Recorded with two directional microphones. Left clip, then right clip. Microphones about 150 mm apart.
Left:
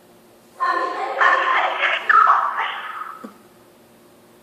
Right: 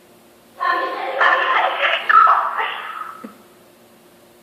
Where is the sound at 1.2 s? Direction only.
20° right (ahead or behind).